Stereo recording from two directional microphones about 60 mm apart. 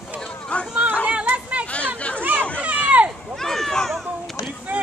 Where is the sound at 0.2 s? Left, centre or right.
Centre.